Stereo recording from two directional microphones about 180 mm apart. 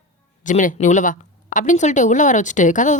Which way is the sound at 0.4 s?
45° left (ahead or behind).